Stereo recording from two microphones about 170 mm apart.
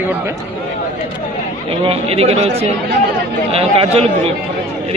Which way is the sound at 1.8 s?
35° right (ahead or behind).